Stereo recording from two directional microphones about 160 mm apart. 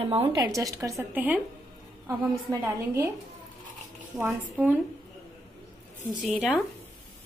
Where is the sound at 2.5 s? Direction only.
20° right (ahead or behind).